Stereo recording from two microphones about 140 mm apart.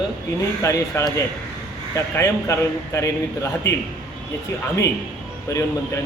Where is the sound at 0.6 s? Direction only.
20° left (ahead or behind).